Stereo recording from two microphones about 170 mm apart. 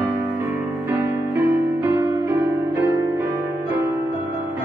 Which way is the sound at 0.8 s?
15° right (ahead or behind).